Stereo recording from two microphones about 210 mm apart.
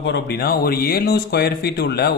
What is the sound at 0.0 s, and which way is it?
A man's voice, 50° left (ahead or behind).